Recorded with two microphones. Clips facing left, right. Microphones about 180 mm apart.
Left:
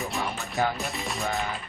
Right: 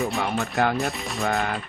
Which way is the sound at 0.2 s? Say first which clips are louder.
Right 1 dB; 60° right (ahead or behind).